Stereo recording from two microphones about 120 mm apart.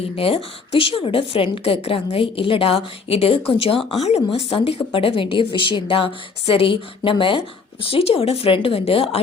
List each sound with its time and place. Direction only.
0.2 s a woman's voice: 50° left (ahead or behind)
3.8 s speech: centre (ahead or behind)
4.0 s a woman's voice: 60° left (ahead or behind)